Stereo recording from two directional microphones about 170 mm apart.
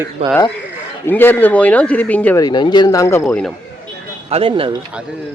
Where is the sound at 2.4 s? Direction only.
25° left (ahead or behind); by 3.5 s 10° left (ahead or behind).